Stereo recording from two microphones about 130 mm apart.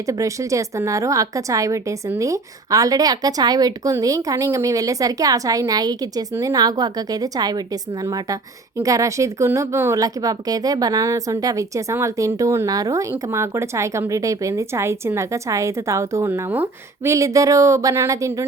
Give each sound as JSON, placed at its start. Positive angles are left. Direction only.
{"t": 0.0, "sound": "speech", "side_deg": -25}